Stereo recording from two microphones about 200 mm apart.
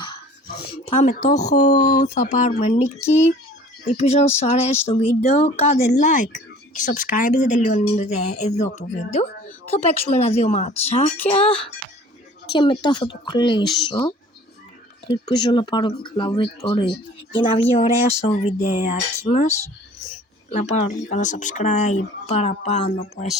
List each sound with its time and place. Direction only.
0.9 s speech: 35° left (ahead or behind)
3.8 s speech: 35° left (ahead or behind)
12.5 s speech: 20° left (ahead or behind)